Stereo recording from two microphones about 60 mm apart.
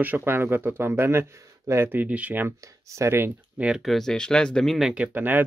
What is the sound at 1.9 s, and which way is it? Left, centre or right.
Speech, right.